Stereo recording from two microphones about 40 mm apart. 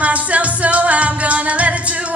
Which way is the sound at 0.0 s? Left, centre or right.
Right.